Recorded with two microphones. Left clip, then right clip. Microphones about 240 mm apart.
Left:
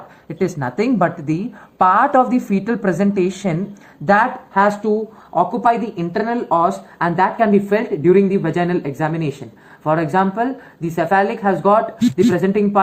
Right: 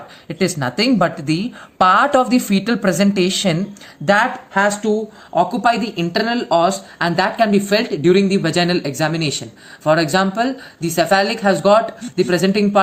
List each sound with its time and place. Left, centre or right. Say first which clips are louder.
0.3 s speech: right 1 dB; right